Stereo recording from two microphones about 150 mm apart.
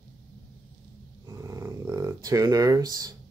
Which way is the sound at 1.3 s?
20° right (ahead or behind).